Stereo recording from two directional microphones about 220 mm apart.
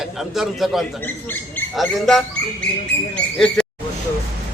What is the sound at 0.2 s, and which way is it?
Speech, centre (ahead or behind).